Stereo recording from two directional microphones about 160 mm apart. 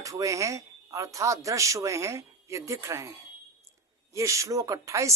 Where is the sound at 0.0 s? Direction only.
20° right (ahead or behind).